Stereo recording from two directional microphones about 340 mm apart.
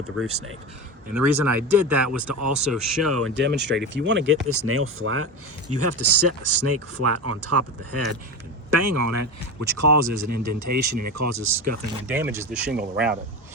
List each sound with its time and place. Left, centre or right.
0.3 s speech: right
1.0 s speech: right
9.6 s speech: right
12.0 s speech: centre